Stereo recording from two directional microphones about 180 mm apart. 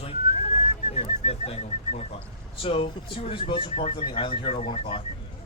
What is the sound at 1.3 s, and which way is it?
Speech, 35° left (ahead or behind).